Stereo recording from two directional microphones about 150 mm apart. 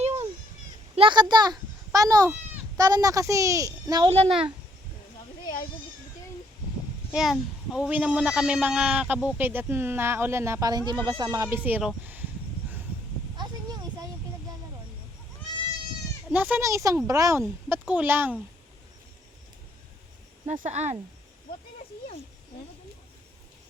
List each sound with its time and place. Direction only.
0.0 s a sound: 50° right (ahead or behind)
0.9 s a child's voice: 30° right (ahead or behind)
4.3 s a child's voice: 5° right (ahead or behind)
7.1 s a child's voice: 5° right (ahead or behind); by 11.4 s 25° right (ahead or behind)
11.4 s speech: 10° right (ahead or behind)
16.3 s a child's voice: 10° right (ahead or behind)
20.5 s speech: 50° right (ahead or behind)